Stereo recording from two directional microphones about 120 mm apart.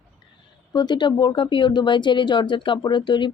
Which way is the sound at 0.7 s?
35° left (ahead or behind).